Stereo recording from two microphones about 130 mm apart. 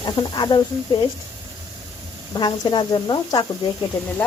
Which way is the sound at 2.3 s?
35° left (ahead or behind).